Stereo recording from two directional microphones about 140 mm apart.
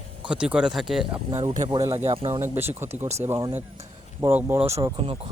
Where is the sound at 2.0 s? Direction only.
50° right (ahead or behind).